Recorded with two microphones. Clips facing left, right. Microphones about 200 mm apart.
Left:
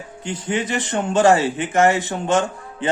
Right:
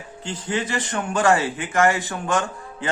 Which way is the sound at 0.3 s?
20° left (ahead or behind).